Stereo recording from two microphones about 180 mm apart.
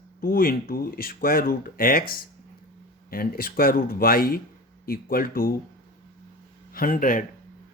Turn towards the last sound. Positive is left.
turn(degrees=50)  # may be behind; listen again after turning